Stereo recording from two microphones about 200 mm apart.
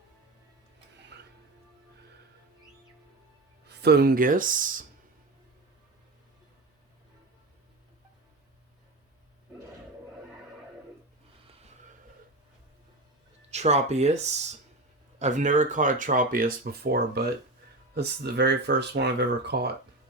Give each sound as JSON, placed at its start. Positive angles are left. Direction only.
{"t": 1.1, "sound": "music", "side_deg": -60}
{"t": 3.7, "sound": "speech", "side_deg": -55}
{"t": 13.5, "sound": "speech", "side_deg": -35}